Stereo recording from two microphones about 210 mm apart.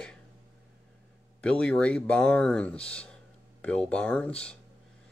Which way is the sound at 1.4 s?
5° left (ahead or behind).